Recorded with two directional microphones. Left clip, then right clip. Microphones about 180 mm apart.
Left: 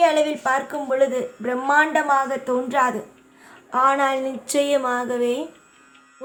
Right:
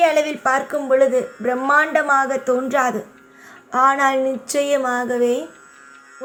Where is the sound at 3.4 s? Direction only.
20° right (ahead or behind).